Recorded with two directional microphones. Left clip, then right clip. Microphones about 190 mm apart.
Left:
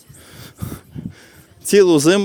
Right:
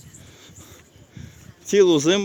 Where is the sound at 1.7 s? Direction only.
40° left (ahead or behind).